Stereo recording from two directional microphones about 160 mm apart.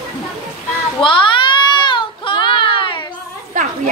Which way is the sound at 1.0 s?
30° left (ahead or behind).